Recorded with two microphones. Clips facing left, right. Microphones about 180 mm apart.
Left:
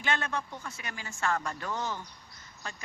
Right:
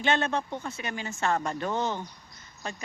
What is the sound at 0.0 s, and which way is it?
Speech, 25° right (ahead or behind).